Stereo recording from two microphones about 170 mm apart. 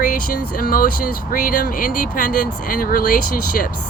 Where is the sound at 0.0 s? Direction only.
55° left (ahead or behind).